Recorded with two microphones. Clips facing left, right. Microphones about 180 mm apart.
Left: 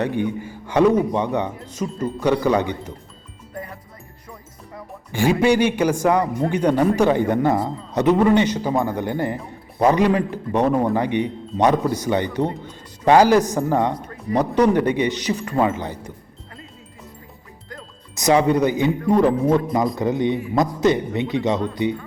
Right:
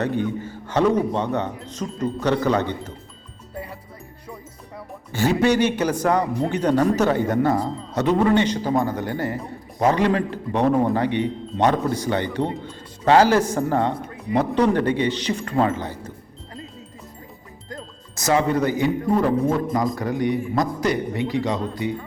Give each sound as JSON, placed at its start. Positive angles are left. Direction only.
{"t": 0.0, "sound": "speech", "side_deg": 15}
{"t": 5.1, "sound": "speech", "side_deg": 15}
{"t": 12.6, "sound": "music", "side_deg": 15}
{"t": 13.5, "sound": "speech", "side_deg": 15}
{"t": 18.1, "sound": "speech", "side_deg": 15}